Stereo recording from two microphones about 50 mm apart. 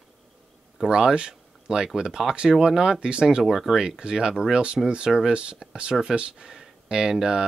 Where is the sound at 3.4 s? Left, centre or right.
Centre.